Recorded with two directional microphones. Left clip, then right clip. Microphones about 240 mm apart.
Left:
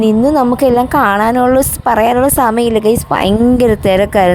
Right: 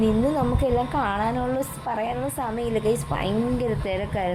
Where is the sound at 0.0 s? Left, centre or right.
Left.